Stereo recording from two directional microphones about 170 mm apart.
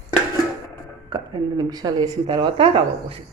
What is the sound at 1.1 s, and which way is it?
Speech, 25° right (ahead or behind).